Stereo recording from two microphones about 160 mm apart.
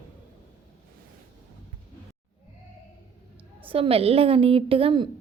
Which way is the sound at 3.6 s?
35° right (ahead or behind).